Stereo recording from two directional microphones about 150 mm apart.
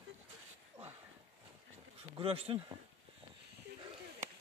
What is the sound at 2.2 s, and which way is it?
Speech, 40° right (ahead or behind).